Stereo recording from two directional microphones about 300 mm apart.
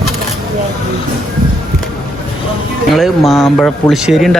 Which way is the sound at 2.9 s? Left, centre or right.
Centre.